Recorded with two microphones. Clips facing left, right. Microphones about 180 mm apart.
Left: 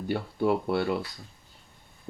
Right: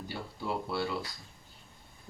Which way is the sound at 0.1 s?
60° left (ahead or behind).